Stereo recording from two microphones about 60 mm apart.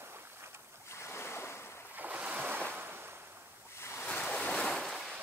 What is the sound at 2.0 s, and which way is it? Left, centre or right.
Waves, right.